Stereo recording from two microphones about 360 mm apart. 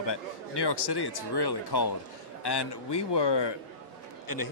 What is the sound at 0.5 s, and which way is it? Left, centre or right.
Speech, left.